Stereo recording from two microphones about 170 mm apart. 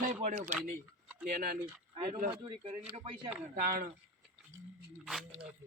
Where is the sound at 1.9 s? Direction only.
30° right (ahead or behind).